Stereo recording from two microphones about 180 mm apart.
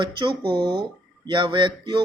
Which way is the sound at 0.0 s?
25° right (ahead or behind).